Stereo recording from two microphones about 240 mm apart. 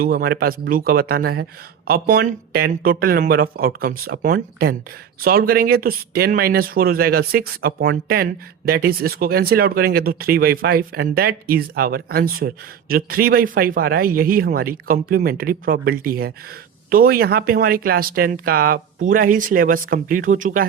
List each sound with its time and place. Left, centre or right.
0.0 s speech: right